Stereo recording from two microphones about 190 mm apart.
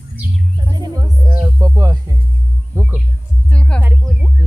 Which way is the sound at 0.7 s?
20° right (ahead or behind).